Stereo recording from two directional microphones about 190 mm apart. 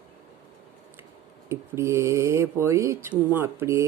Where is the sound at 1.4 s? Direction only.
15° right (ahead or behind).